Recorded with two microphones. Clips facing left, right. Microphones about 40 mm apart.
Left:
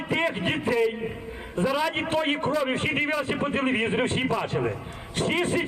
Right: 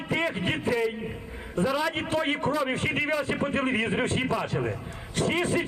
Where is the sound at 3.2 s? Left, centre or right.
Left.